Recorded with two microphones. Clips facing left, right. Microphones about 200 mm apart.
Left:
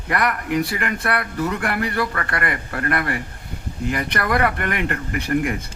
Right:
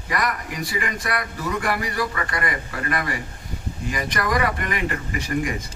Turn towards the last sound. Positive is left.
turn(degrees=60)  # may be behind; listen again after turning